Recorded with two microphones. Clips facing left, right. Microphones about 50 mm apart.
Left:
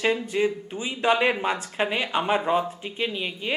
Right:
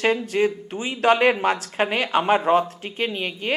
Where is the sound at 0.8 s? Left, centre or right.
Centre.